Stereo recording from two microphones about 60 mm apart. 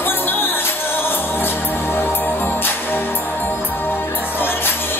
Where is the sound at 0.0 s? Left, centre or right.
Left.